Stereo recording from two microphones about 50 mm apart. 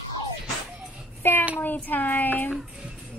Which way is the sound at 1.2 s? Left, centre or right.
Left.